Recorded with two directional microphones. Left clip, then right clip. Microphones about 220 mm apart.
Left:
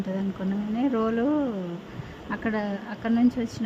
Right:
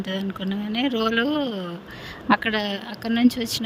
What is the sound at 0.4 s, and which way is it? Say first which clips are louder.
A woman's voice: right 2 dB; 35° right (ahead or behind).